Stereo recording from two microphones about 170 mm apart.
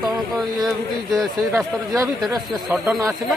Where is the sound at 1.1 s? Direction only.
20° right (ahead or behind).